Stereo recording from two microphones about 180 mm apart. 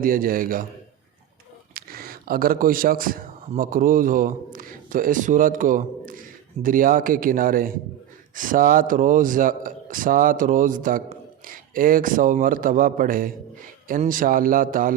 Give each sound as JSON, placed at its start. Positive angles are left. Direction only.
{"t": 0.0, "sound": "a man's voice", "side_deg": -50}
{"t": 1.7, "sound": "a man's voice", "side_deg": -55}